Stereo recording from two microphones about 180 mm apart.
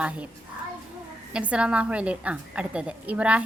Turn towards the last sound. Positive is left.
turn(degrees=-5)  # may be behind; listen again after turning